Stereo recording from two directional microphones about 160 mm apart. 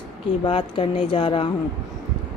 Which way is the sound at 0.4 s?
30° left (ahead or behind).